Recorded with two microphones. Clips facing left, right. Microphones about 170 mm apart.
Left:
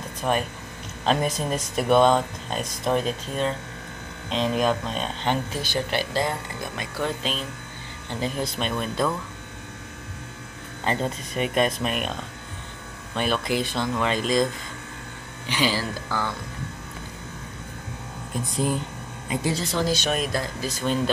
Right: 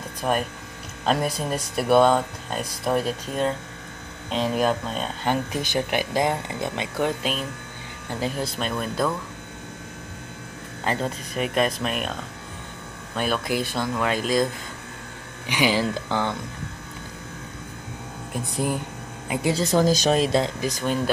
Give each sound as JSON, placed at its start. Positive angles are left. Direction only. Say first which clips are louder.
{"t": 0.2, "sound": "speech", "louder": "even", "side_deg": -5}
{"t": 7.3, "sound": "speech", "louder": "right 2 dB", "side_deg": -10}
{"t": 10.9, "sound": "speech", "louder": "even", "side_deg": 0}
{"t": 15.4, "sound": "speech", "louder": "right 3 dB", "side_deg": -15}
{"t": 19.7, "sound": "speech", "louder": "right 8 dB", "side_deg": -45}